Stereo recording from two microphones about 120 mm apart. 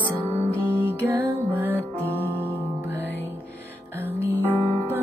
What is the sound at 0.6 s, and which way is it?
Music, 15° right (ahead or behind).